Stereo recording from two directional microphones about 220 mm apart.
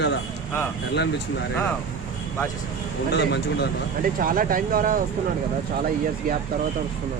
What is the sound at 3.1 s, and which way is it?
Speech, 50° left (ahead or behind).